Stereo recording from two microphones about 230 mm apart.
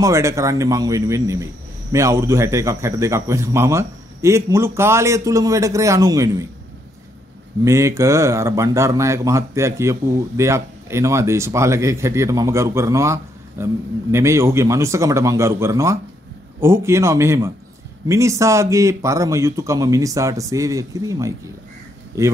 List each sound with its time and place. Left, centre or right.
0.0 s a man's voice: centre
7.6 s a man's voice: centre